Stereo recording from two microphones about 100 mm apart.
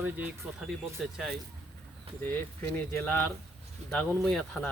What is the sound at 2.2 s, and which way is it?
Speech, 20° left (ahead or behind).